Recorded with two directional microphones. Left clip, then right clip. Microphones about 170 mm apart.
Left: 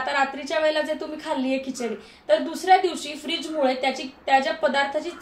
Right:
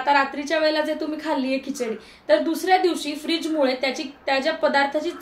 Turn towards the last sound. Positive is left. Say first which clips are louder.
# right 2 dB
turn(degrees=-30)  # may be behind; listen again after turning